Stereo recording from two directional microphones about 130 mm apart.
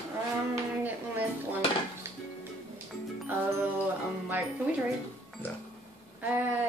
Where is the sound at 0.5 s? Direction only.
15° right (ahead or behind).